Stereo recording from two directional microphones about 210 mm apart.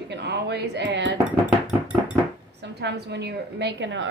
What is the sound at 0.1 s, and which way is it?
Speech, 55° right (ahead or behind).